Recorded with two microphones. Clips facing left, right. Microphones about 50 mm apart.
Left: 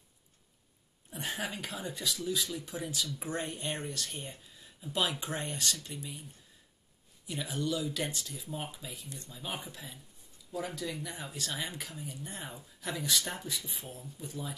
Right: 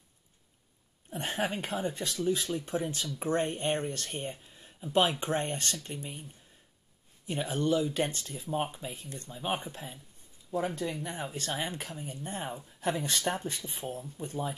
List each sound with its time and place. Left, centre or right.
1.1 s speech: right
4.3 s a sound: right
5.2 s speech: right
7.2 s speech: right